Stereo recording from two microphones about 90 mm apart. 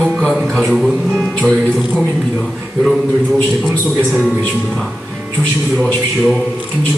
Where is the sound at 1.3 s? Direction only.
10° left (ahead or behind).